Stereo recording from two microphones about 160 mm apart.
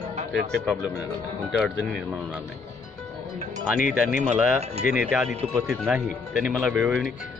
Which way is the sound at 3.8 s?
55° left (ahead or behind).